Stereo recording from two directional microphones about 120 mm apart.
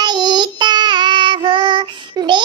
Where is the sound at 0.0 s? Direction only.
35° right (ahead or behind).